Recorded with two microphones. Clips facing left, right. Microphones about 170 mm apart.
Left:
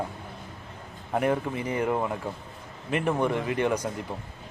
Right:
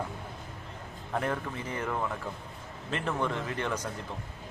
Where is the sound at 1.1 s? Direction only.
15° left (ahead or behind).